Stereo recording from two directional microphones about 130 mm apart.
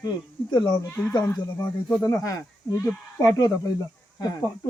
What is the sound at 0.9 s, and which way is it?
Speech, 15° left (ahead or behind).